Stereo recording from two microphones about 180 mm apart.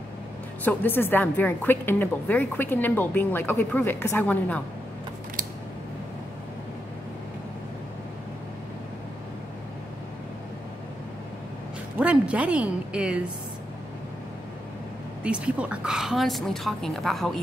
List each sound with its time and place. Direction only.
0.7 s a woman's voice: 10° left (ahead or behind)
12.0 s a woman's voice: 5° right (ahead or behind)
15.2 s a woman's voice: 5° right (ahead or behind)